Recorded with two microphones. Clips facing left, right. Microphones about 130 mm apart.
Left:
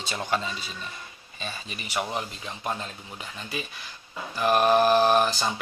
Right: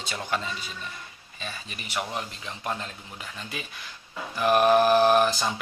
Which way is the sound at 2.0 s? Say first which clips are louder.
Left 2 dB; 10° left (ahead or behind).